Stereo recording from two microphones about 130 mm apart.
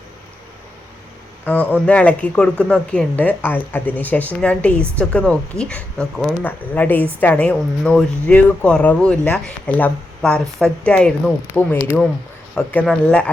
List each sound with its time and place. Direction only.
1.5 s a woman's voice: 10° left (ahead or behind)